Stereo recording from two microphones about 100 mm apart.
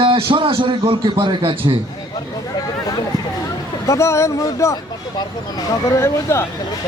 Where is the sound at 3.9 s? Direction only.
30° left (ahead or behind).